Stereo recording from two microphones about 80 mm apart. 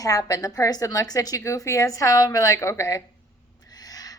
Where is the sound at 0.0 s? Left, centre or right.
Left.